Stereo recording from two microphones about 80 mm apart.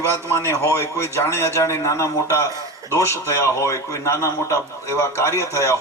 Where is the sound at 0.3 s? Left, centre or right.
Left.